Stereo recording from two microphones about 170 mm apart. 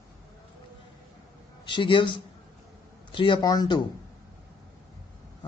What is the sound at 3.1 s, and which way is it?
Speech, 30° left (ahead or behind).